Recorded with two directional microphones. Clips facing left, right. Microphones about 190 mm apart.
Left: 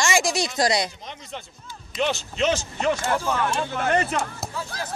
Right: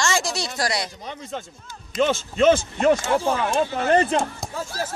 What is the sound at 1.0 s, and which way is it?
Speech, 50° right (ahead or behind).